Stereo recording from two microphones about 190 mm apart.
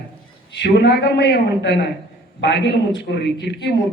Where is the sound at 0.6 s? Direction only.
65° left (ahead or behind).